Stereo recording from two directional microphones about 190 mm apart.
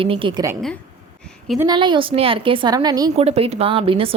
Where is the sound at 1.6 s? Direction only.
20° right (ahead or behind).